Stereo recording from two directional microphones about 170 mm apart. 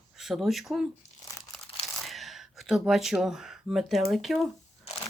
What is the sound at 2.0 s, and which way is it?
Speech, centre (ahead or behind).